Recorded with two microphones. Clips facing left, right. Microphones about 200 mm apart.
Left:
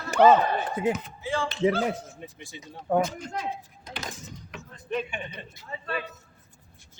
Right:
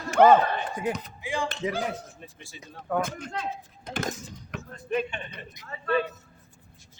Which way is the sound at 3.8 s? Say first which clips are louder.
Right 8 dB; 50° right (ahead or behind).